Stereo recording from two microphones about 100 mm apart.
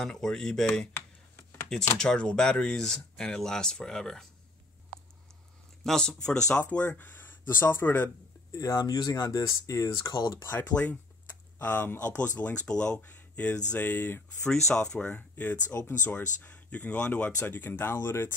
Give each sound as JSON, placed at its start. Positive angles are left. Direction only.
{"t": 0.0, "sound": "speech", "side_deg": 5}
{"t": 0.9, "sound": "a sound", "side_deg": 25}
{"t": 2.0, "sound": "speech", "side_deg": 10}
{"t": 5.9, "sound": "speech", "side_deg": 5}
{"t": 6.6, "sound": "speech", "side_deg": 20}
{"t": 8.5, "sound": "speech", "side_deg": 35}
{"t": 10.4, "sound": "speech", "side_deg": 30}
{"t": 14.4, "sound": "speech", "side_deg": 5}